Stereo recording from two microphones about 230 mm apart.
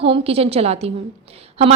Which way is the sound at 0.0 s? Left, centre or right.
Right.